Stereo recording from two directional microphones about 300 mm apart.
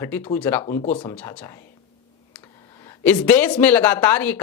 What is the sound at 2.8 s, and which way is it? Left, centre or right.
A man's voice, centre.